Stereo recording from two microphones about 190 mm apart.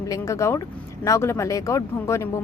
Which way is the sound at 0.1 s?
15° left (ahead or behind).